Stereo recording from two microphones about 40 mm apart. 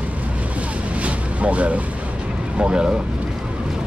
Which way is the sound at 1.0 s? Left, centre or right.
Right.